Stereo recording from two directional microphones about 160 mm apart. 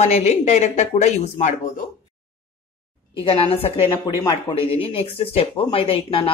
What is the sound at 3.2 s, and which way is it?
Speech, 35° left (ahead or behind).